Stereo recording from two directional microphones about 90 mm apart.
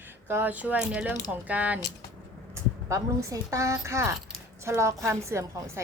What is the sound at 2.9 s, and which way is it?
A woman's voice, 35° right (ahead or behind).